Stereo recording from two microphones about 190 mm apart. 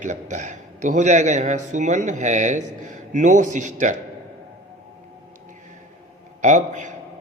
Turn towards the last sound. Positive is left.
turn(degrees=-40)  # may be behind; listen again after turning